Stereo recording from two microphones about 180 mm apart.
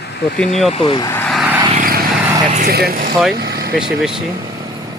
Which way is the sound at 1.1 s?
5° left (ahead or behind).